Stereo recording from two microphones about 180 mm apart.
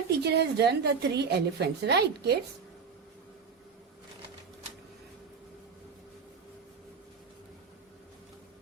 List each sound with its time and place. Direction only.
0.2 s a woman's voice: 65° right (ahead or behind)